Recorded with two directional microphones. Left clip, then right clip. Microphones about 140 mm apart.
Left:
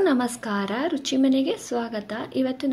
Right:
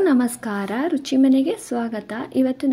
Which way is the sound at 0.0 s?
40° right (ahead or behind).